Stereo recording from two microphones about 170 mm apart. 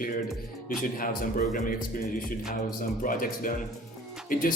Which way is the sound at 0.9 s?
55° left (ahead or behind).